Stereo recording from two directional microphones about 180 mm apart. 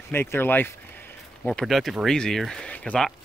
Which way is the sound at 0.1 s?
15° left (ahead or behind).